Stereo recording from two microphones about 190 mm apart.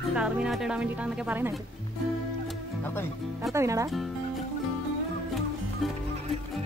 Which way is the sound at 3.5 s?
15° right (ahead or behind).